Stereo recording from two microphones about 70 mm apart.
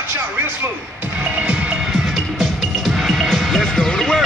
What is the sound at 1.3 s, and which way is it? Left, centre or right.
Music, centre.